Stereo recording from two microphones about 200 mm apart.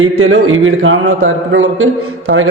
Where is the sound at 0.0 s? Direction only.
85° right.